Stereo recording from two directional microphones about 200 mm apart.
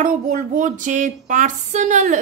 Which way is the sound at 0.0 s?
40° right (ahead or behind).